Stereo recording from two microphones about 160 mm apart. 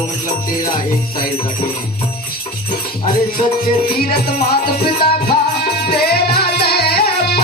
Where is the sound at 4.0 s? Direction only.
75° left (ahead or behind).